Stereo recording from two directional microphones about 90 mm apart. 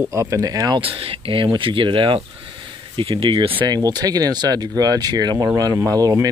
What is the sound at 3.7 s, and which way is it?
Speech, 50° right (ahead or behind).